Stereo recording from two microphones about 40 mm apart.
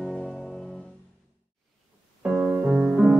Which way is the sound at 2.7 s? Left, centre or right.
Right.